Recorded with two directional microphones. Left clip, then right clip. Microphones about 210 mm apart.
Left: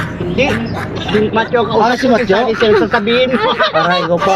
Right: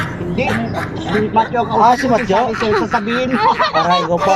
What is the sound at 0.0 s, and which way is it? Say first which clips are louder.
Speech: left 4 dB; centre (ahead or behind).